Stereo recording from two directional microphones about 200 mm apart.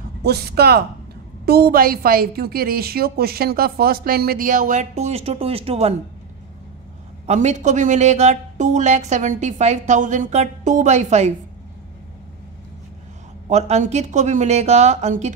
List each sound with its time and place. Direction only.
0.2 s a woman's voice: 55° right (ahead or behind); by 5.9 s 30° right (ahead or behind)
7.2 s speech: 35° right (ahead or behind)
13.5 s speech: 35° right (ahead or behind)